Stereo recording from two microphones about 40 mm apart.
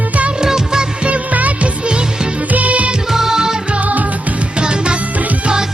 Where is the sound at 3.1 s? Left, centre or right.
Centre.